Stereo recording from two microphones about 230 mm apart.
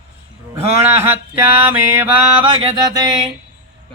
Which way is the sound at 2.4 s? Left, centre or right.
Right.